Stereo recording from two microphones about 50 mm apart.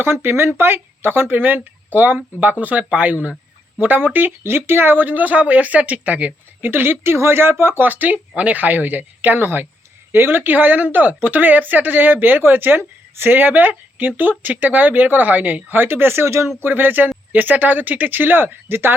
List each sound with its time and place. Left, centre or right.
0.0 s speech: right
6.7 s speech: right
16.6 s speech: right